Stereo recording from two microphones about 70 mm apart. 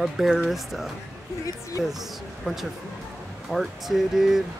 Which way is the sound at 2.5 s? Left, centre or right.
Centre.